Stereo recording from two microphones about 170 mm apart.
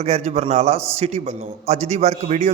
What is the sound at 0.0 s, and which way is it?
A man's voice, 40° right (ahead or behind).